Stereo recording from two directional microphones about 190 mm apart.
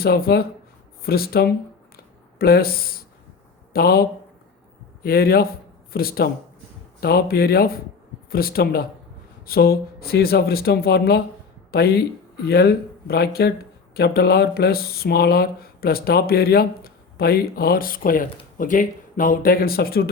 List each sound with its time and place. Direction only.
0.0 s speech: 55° left (ahead or behind)
5.0 s speech: 50° left (ahead or behind)